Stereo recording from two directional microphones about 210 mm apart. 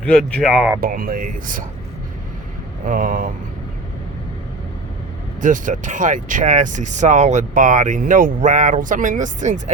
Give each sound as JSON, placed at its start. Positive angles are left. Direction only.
{"t": 0.0, "sound": "speech", "side_deg": 0}
{"t": 0.8, "sound": "speech", "side_deg": -45}
{"t": 2.8, "sound": "speech", "side_deg": -40}
{"t": 5.4, "sound": "speech", "side_deg": -40}